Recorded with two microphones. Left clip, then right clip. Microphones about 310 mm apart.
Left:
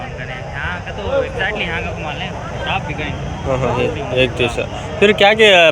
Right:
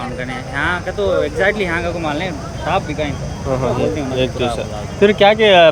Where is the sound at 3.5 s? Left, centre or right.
Centre.